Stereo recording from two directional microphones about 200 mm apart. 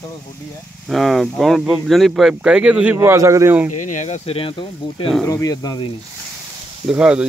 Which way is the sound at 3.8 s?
40° left (ahead or behind).